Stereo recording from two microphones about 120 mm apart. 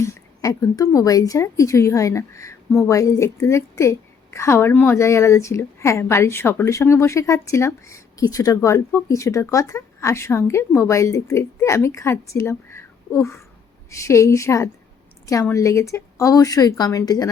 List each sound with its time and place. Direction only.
0.0 s a woman's voice: 25° left (ahead or behind)